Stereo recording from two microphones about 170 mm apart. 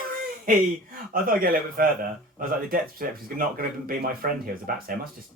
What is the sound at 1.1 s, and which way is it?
Speech, 60° right (ahead or behind).